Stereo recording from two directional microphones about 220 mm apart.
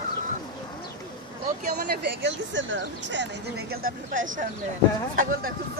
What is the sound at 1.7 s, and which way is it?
Speech, 50° right (ahead or behind).